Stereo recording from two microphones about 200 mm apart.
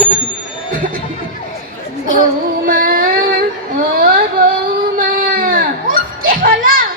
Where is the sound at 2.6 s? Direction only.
45° right (ahead or behind).